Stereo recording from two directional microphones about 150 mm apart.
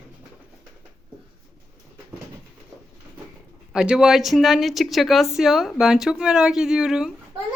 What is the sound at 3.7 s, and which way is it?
A woman's voice, 5° right (ahead or behind).